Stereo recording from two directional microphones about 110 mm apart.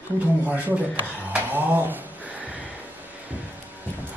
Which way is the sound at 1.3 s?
15° right (ahead or behind).